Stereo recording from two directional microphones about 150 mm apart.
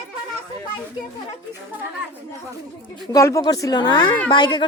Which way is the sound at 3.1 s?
20° left (ahead or behind).